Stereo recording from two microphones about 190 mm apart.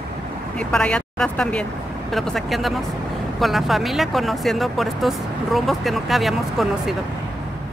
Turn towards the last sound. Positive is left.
turn(degrees=0)  # may be behind; listen again after turning